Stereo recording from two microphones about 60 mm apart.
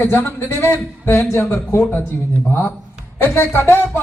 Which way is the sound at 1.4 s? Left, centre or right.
Left.